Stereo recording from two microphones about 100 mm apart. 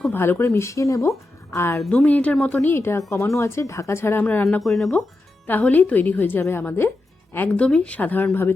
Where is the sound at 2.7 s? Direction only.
25° left (ahead or behind).